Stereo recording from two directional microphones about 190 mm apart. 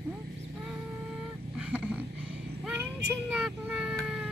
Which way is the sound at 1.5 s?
5° right (ahead or behind).